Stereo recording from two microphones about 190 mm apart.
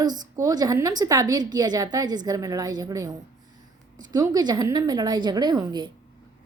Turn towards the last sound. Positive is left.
turn(degrees=-20)  # may be behind; listen again after turning